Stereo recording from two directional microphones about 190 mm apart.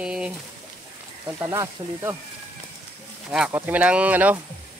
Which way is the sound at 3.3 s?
10° right (ahead or behind).